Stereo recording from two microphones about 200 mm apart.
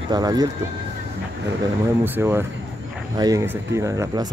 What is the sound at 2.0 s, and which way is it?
Speech, 10° right (ahead or behind).